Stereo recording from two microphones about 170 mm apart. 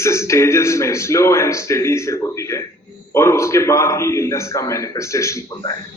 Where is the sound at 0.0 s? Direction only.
15° left (ahead or behind).